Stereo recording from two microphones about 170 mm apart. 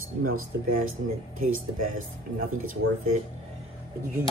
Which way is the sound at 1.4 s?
55° right (ahead or behind).